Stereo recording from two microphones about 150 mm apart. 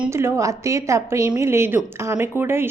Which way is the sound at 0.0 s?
15° right (ahead or behind).